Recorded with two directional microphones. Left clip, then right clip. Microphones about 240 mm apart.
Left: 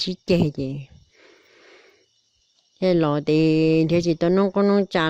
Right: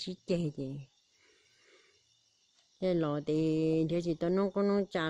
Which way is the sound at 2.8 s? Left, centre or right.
Left.